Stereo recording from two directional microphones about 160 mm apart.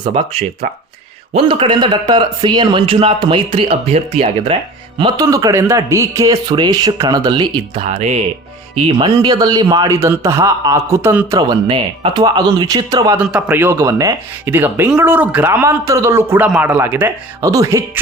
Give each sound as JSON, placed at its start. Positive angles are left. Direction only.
{"t": 0.0, "sound": "speech", "side_deg": -35}
{"t": 4.9, "sound": "a man's voice", "side_deg": -25}
{"t": 7.9, "sound": "a man's voice", "side_deg": -40}
{"t": 11.3, "sound": "a man's voice", "side_deg": -30}
{"t": 13.1, "sound": "speech", "side_deg": -10}